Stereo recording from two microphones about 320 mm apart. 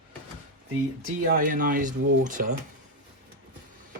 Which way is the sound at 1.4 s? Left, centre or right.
Right.